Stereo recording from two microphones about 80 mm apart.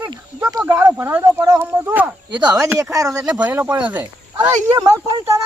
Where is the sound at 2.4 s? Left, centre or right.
Right.